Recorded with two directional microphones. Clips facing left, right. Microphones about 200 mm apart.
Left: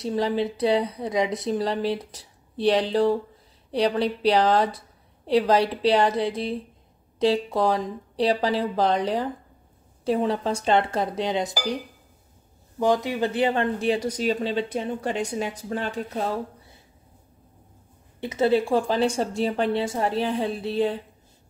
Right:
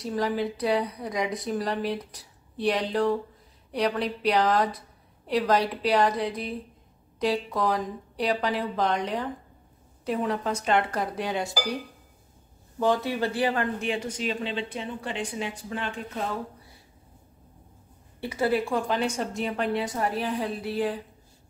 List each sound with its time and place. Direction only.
0.0 s speech: 25° left (ahead or behind)
18.2 s speech: 20° left (ahead or behind)